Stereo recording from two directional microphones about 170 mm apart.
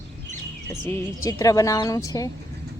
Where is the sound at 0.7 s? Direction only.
20° left (ahead or behind).